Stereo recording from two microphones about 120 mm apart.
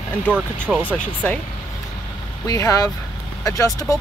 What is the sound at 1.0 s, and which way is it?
Speech, 10° left (ahead or behind).